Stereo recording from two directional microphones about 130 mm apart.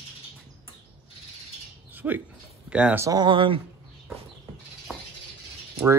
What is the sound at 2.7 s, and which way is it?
Speech, 10° right (ahead or behind).